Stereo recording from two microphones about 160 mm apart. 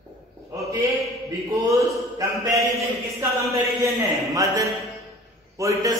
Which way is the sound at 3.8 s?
20° right (ahead or behind).